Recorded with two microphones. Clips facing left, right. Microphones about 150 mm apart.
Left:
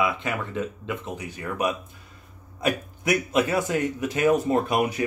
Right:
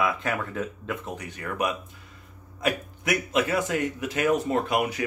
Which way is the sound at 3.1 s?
30° left (ahead or behind).